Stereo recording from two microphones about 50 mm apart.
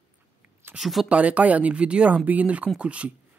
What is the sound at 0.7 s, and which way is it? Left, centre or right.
Speech, centre.